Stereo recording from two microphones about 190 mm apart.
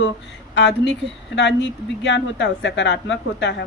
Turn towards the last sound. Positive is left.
turn(degrees=65)  # may be behind; listen again after turning